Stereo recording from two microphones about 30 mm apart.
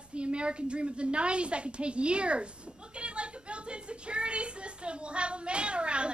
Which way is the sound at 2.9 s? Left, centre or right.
Right.